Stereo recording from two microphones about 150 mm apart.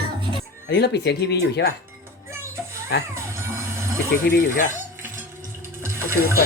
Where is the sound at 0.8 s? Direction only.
90° left.